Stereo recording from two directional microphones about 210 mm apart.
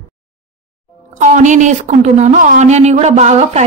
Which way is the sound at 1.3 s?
35° right (ahead or behind).